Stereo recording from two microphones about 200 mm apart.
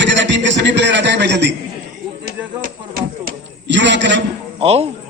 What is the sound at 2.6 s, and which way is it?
Speech, 45° right (ahead or behind).